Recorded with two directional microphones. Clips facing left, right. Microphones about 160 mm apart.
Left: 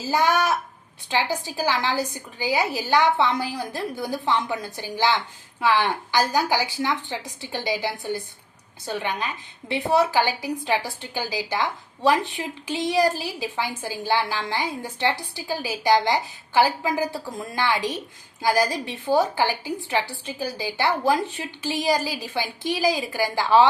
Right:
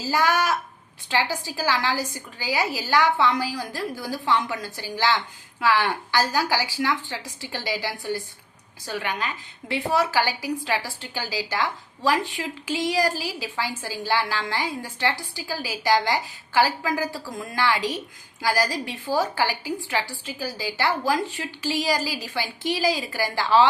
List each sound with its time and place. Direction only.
0.0 s a woman's voice: 20° left (ahead or behind)